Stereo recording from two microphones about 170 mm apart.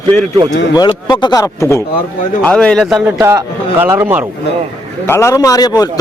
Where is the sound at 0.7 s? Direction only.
25° left (ahead or behind).